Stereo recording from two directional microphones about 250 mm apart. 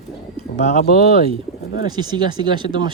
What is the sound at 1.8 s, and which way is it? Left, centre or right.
Speech, centre.